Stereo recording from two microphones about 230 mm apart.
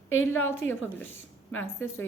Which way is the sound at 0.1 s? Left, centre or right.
Left.